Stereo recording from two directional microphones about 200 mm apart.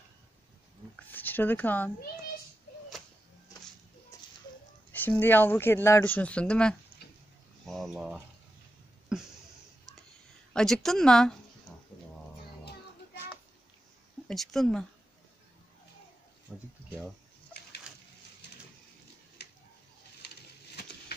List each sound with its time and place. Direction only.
0.9 s a sound: 10° left (ahead or behind)
4.1 s a sound: 15° left (ahead or behind)
4.9 s speech: 10° left (ahead or behind)
7.0 s pig: 55° left (ahead or behind)
7.6 s a woman's voice: centre (ahead or behind)
10.5 s a woman's voice: centre (ahead or behind)
14.2 s a woman's voice: centre (ahead or behind)
16.5 s a woman's voice: centre (ahead or behind)